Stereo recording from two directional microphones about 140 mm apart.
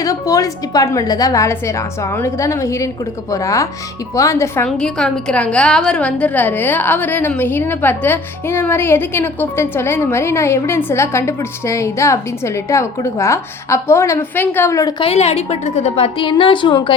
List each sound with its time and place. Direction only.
0.0 s speech: 25° left (ahead or behind)
4.8 s a woman's voice: 5° left (ahead or behind); by 15.0 s 25° left (ahead or behind)
15.0 s a woman's voice: 50° left (ahead or behind)